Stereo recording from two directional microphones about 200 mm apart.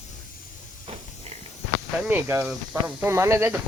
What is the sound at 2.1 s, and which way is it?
Speech, 15° right (ahead or behind).